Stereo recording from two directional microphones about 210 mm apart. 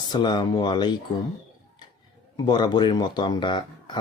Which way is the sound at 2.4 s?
20° left (ahead or behind).